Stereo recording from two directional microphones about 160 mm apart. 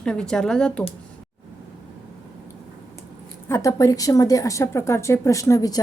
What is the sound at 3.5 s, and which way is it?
A woman's voice, 20° left (ahead or behind).